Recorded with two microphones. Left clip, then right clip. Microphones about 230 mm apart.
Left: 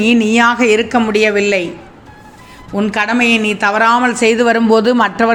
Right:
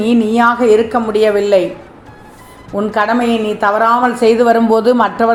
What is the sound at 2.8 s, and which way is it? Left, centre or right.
A woman's voice, left.